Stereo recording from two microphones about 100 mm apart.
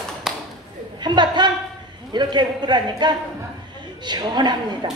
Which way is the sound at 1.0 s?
50° right (ahead or behind).